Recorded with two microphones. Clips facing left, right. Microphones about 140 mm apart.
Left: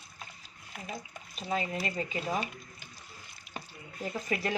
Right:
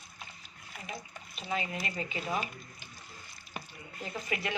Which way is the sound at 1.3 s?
35° left (ahead or behind).